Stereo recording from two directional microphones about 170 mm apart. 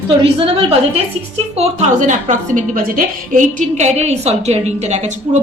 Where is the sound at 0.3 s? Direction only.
35° right (ahead or behind).